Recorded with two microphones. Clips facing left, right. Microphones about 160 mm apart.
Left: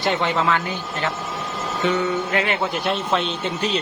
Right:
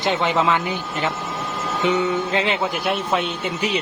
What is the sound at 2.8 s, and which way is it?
Speech, 10° right (ahead or behind).